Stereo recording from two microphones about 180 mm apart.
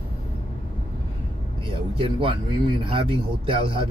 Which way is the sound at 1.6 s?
30° right (ahead or behind).